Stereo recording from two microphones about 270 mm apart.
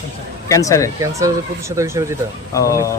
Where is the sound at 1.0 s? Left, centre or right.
Centre.